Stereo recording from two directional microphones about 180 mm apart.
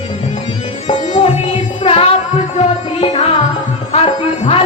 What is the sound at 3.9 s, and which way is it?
Music, 30° left (ahead or behind).